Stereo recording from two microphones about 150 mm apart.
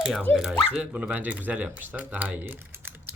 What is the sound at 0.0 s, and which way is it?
Speech, 5° right (ahead or behind).